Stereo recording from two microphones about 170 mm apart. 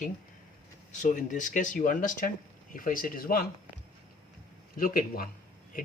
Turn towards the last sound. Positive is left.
turn(degrees=55)  # may be behind; listen again after turning